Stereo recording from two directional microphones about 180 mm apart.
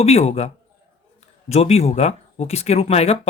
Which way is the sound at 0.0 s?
35° left (ahead or behind).